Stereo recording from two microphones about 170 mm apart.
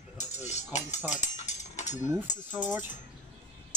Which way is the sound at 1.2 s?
45° left (ahead or behind).